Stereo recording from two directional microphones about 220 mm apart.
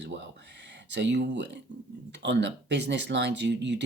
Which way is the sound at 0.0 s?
50° right (ahead or behind).